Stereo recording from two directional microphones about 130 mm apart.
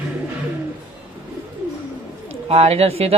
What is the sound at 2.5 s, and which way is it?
Speech, 50° right (ahead or behind).